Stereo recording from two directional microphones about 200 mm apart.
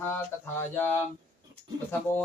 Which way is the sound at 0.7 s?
10° left (ahead or behind).